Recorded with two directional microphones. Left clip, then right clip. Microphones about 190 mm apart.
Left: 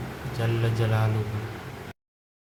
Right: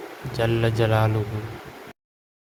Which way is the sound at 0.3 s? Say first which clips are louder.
Right 7 dB; 50° right (ahead or behind).